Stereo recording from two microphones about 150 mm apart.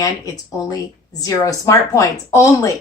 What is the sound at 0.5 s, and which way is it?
Speech, 20° left (ahead or behind).